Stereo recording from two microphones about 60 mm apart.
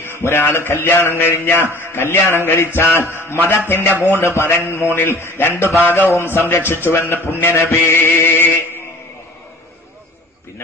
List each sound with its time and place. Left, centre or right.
0.0 s a man's voice: left
4.0 s a man's voice: left